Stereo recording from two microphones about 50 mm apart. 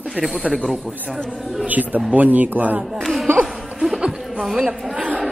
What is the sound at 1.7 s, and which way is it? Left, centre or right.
Speech, right.